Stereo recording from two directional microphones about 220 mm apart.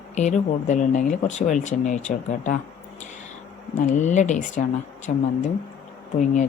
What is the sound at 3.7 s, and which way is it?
Speech, 35° left (ahead or behind).